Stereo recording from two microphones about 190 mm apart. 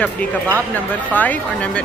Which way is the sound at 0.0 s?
5° left (ahead or behind).